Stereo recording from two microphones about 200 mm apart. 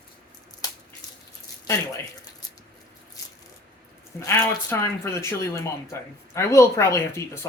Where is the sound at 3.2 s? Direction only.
15° left (ahead or behind).